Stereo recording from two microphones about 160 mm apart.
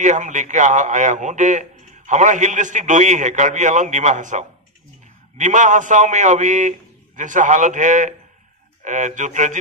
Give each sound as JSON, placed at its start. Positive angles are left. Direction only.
{"t": 0.0, "sound": "a man's voice", "side_deg": -50}